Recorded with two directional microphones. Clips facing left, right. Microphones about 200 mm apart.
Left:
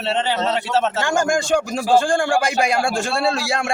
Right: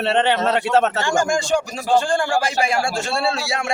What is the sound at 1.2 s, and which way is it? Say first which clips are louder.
A woman's voice: left 1 dB; 60° left (ahead or behind).